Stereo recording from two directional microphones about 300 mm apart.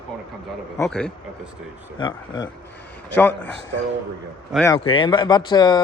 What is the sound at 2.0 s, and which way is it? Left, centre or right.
A man's voice, centre.